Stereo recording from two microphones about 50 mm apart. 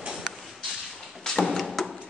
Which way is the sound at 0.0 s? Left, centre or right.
Centre.